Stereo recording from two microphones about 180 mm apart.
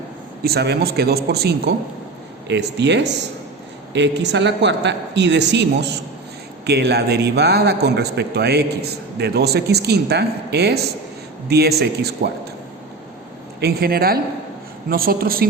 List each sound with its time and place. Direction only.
0.4 s a man's voice: 65° right (ahead or behind)
13.6 s a man's voice: 60° right (ahead or behind)